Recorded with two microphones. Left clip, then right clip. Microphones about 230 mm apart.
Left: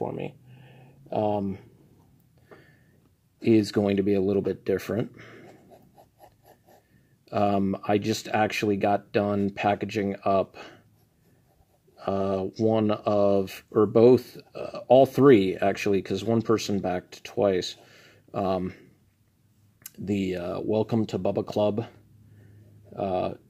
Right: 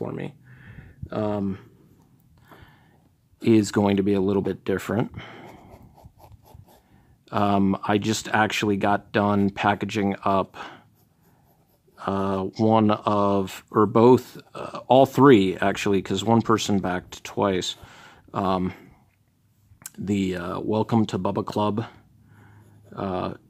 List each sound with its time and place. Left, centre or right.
0.0 s a sound: centre
3.3 s speech: centre
7.2 s speech: centre
12.0 s speech: centre
22.9 s speech: centre